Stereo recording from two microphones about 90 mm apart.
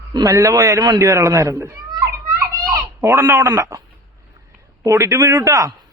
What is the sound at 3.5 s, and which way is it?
Speech, 40° right (ahead or behind).